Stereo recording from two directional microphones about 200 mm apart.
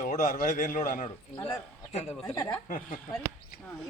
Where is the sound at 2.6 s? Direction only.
40° left (ahead or behind).